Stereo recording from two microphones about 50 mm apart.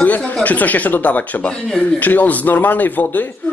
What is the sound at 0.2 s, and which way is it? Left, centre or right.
Speech, left.